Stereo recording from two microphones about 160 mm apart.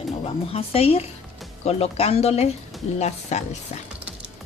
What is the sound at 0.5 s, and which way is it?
Speech, 40° left (ahead or behind).